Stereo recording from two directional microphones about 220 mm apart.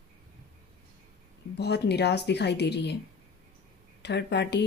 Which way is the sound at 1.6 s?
50° left (ahead or behind).